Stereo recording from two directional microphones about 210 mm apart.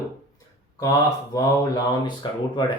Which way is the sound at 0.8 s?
15° left (ahead or behind).